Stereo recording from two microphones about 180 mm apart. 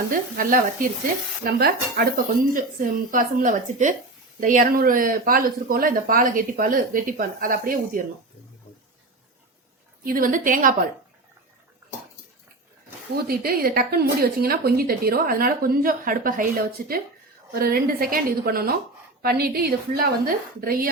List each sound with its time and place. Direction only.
0.3 s speech: 50° right (ahead or behind)
10.0 s speech: 50° right (ahead or behind)
13.2 s speech: 55° right (ahead or behind)